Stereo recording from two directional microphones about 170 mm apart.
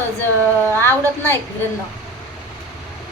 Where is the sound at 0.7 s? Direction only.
15° left (ahead or behind).